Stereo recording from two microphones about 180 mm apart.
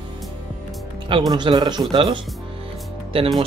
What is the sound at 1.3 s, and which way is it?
Speech, 25° right (ahead or behind).